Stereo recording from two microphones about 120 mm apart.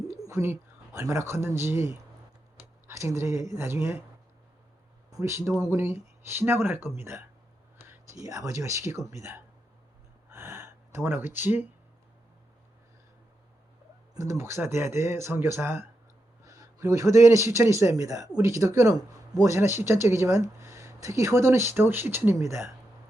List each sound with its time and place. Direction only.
0.1 s speech: 25° right (ahead or behind)
5.1 s speech: 25° right (ahead or behind)
10.2 s gasp: 20° right (ahead or behind)
14.1 s speech: 25° right (ahead or behind)